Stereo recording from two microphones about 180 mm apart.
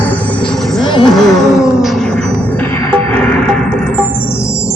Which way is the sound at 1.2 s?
Centre (ahead or behind).